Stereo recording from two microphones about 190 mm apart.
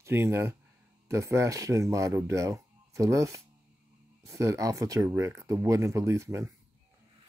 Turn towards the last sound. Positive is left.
turn(degrees=-15)  # may be behind; listen again after turning